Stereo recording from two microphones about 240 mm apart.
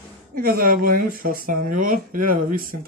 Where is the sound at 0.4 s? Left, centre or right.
Right.